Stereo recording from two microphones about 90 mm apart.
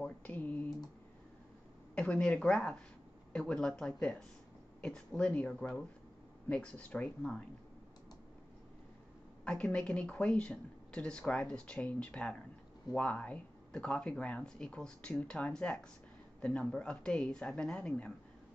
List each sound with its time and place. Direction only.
0.0 s typing: 15° left (ahead or behind)
2.0 s speech: 10° left (ahead or behind)
9.4 s speech: 10° left (ahead or behind)